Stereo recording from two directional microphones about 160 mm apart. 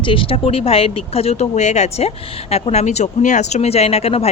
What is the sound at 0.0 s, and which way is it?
Speech, 35° left (ahead or behind).